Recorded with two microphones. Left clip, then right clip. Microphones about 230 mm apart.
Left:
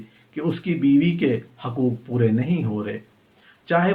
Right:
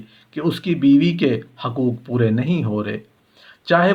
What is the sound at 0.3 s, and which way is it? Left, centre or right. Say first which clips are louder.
A man's voice: right 4 dB; right.